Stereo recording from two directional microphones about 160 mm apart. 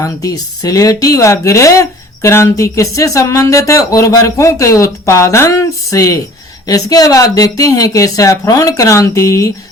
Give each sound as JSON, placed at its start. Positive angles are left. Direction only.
{"t": 0.0, "sound": "a woman's voice", "side_deg": 20}